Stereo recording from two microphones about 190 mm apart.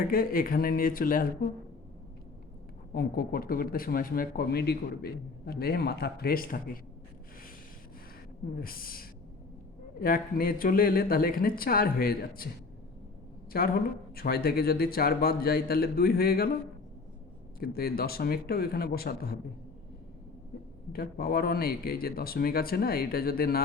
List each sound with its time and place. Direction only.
0.1 s speech: 50° left (ahead or behind)
2.9 s speech: 55° left (ahead or behind)
8.6 s speech: 50° left (ahead or behind)
13.5 s speech: 50° left (ahead or behind)
17.6 s speech: 55° left (ahead or behind)
20.9 s speech: 50° left (ahead or behind)